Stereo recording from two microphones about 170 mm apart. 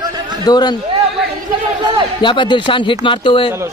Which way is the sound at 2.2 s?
30° left (ahead or behind).